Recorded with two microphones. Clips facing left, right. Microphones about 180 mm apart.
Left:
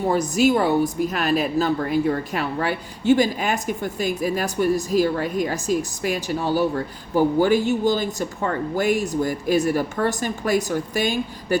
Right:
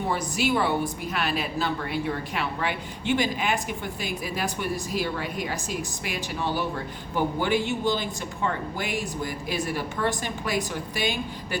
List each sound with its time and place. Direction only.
0.1 s a woman's voice: 40° left (ahead or behind)